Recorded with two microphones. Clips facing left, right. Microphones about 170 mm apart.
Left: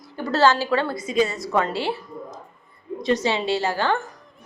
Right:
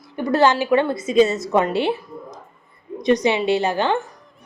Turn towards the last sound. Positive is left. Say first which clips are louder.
# right 3 dB
turn(degrees=-20)  # may be behind; listen again after turning